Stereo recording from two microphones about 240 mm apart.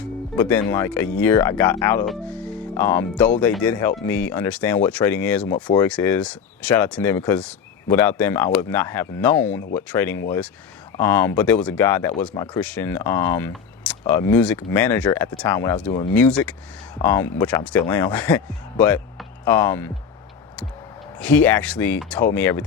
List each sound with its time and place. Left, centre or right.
0.0 s speech: centre
21.2 s speech: centre